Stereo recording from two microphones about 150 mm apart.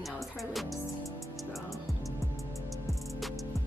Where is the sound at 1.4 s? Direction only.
Centre (ahead or behind).